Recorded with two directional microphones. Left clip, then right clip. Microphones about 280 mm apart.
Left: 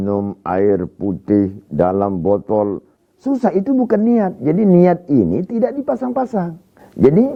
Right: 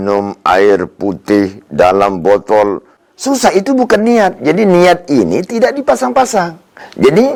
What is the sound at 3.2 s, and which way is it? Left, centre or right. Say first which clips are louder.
A woman's voice: right 7 dB; centre.